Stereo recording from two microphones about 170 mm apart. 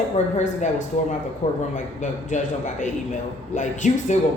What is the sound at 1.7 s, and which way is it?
A man's voice, 45° left (ahead or behind).